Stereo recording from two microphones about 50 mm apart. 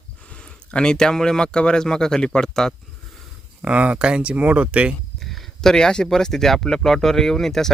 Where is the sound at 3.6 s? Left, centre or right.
Right.